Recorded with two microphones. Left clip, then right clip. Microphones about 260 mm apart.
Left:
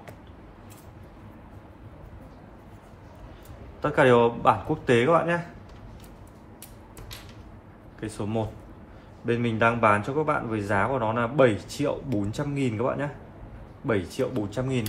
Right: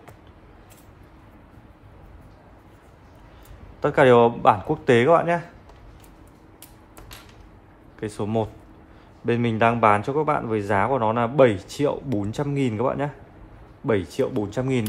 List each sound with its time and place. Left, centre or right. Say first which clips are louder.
3.8 s speech: right 4 dB; right
8.0 s speech: right 5 dB; right